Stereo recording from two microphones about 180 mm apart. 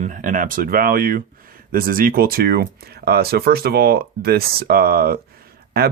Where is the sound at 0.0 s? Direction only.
45° right (ahead or behind).